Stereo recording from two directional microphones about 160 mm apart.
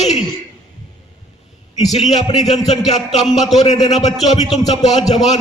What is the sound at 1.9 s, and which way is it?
A man's voice, 45° left (ahead or behind).